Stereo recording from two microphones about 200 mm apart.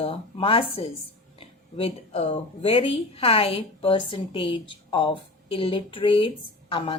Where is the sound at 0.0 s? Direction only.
30° left (ahead or behind).